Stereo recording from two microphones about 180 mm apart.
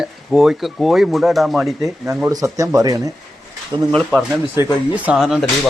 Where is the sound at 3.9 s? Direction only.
5° left (ahead or behind).